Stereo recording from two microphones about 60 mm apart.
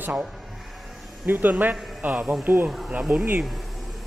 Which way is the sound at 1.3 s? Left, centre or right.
Right.